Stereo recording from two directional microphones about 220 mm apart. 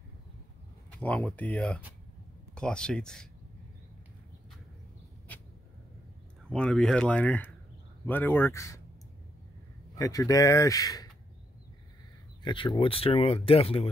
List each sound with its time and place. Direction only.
0.9 s speech: 5° left (ahead or behind)
6.5 s speech: 5° left (ahead or behind)
9.9 s speech: 15° left (ahead or behind)
12.4 s speech: 20° left (ahead or behind)